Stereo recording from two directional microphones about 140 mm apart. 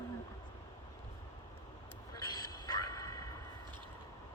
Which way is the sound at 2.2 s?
30° left (ahead or behind).